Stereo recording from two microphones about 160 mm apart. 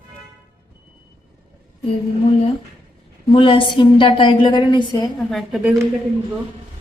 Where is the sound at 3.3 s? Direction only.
35° left (ahead or behind).